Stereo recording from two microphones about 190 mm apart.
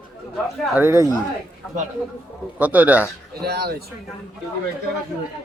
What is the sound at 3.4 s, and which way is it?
Speech, 55° right (ahead or behind).